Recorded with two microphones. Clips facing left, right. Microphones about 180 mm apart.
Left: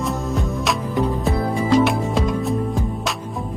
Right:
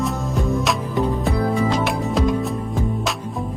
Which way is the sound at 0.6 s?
Centre (ahead or behind).